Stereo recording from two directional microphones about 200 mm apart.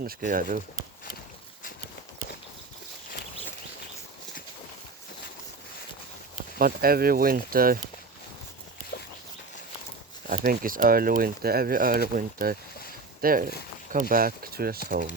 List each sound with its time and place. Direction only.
0.0 s speech: 45° right (ahead or behind)
6.6 s speech: 45° right (ahead or behind)
10.2 s speech: 45° right (ahead or behind)